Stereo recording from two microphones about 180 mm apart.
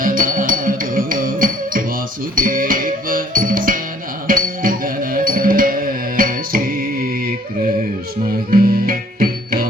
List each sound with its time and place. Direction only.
0.0 s music: 50° right (ahead or behind)
8.4 s music: 50° right (ahead or behind)